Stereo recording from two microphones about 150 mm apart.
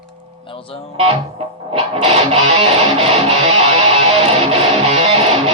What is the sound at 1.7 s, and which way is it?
Music, 40° right (ahead or behind).